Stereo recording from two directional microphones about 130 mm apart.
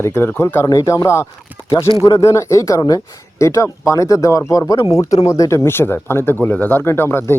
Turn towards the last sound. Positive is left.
turn(degrees=20)  # may be behind; listen again after turning